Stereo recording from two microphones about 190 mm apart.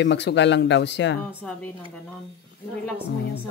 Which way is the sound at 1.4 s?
10° left (ahead or behind).